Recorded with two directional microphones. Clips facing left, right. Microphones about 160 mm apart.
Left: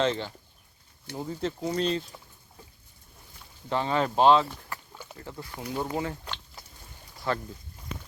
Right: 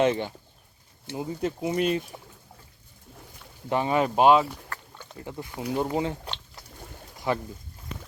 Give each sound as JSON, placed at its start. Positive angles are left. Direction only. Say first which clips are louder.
{"t": 0.0, "sound": "speech", "louder": "right 4 dB", "side_deg": -15}
{"t": 3.7, "sound": "speech", "louder": "right 3 dB", "side_deg": -15}
{"t": 4.7, "sound": "rowboat", "louder": "even", "side_deg": 10}
{"t": 5.2, "sound": "speech", "louder": "right 5 dB", "side_deg": -20}
{"t": 7.3, "sound": "speech", "louder": "right 3 dB", "side_deg": -15}